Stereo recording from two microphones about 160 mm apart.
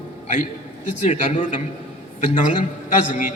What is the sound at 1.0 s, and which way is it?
Speech, 50° left (ahead or behind).